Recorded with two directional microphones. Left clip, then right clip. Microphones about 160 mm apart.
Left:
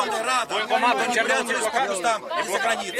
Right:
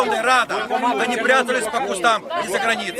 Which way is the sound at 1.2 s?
5° left (ahead or behind).